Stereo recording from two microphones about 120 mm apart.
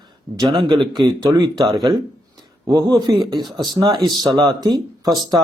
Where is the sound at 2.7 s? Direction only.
35° right (ahead or behind).